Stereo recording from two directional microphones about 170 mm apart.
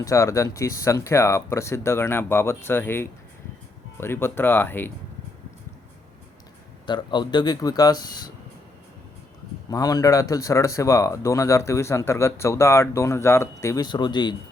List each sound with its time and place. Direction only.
0.0 s speech: 20° left (ahead or behind)
6.8 s speech: 25° left (ahead or behind)
9.6 s speech: 20° left (ahead or behind)